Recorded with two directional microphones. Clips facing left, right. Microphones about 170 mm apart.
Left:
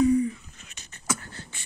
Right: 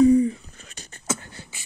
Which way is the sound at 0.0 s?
35° right (ahead or behind).